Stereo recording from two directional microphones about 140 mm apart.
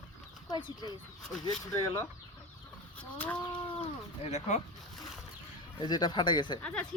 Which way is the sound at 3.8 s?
50° left (ahead or behind).